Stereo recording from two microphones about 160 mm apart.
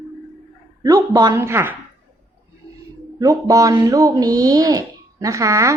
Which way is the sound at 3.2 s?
20° right (ahead or behind).